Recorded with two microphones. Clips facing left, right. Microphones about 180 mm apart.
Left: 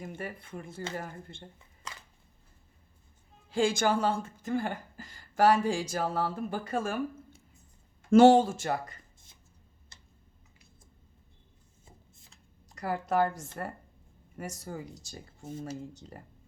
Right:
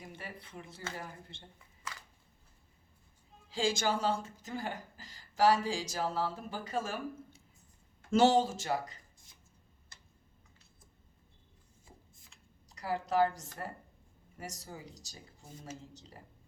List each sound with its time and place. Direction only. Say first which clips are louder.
0.0 s speech: left 7 dB; 50° left (ahead or behind)
3.5 s speech: left 5 dB; 55° left (ahead or behind)
8.1 s speech: left 7 dB; 55° left (ahead or behind)
12.6 s a woman's voice: left 3 dB; 55° left (ahead or behind)